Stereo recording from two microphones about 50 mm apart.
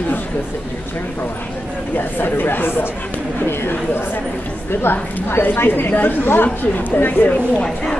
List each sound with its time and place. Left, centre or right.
2.0 s a woman's voice: left
7.6 s speech: centre